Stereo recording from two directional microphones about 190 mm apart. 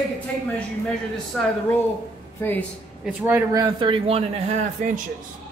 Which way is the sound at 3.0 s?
10° right (ahead or behind).